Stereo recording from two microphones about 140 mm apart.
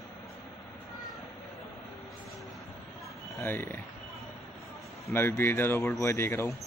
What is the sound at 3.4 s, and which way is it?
Speech, 15° left (ahead or behind).